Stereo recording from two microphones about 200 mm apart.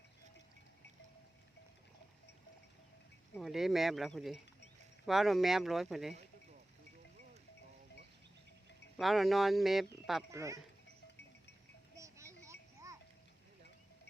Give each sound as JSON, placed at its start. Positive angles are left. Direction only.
{"t": 3.3, "sound": "speech", "side_deg": 0}
{"t": 9.0, "sound": "speech", "side_deg": 0}
{"t": 10.3, "sound": "speech", "side_deg": -15}
{"t": 11.9, "sound": "music", "side_deg": -15}
{"t": 12.5, "sound": "a sound", "side_deg": -15}